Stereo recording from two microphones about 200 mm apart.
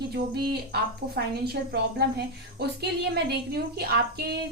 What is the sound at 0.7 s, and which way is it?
A woman's voice, 55° right (ahead or behind).